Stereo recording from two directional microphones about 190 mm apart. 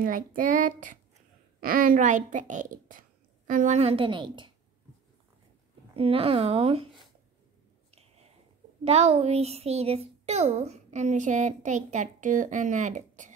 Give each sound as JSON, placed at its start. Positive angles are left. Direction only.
{"t": 0.0, "sound": "a child's voice", "side_deg": -45}
{"t": 5.9, "sound": "a child's voice", "side_deg": -30}
{"t": 8.8, "sound": "a child's voice", "side_deg": -35}